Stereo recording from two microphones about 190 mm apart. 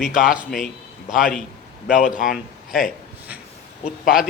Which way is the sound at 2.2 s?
Centre (ahead or behind).